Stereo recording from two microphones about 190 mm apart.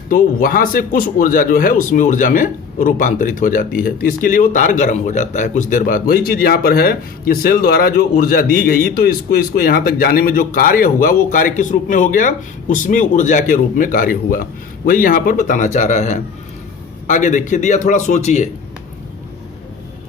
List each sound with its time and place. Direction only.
0.1 s a man's voice: 45° left (ahead or behind)